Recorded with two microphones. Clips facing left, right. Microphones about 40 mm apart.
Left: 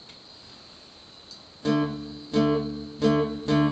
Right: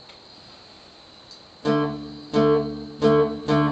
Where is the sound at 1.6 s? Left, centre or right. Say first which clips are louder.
Right 3 dB; centre.